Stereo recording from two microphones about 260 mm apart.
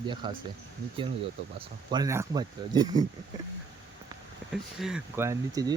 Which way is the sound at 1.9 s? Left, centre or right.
Centre.